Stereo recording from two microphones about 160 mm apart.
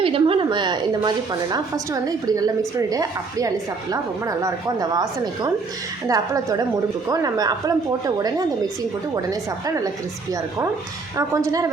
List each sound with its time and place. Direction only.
0.0 s a woman's voice: 35° right (ahead or behind)
11.2 s a woman's voice: 20° right (ahead or behind)